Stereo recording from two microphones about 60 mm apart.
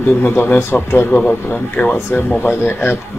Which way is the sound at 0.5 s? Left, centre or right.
Left.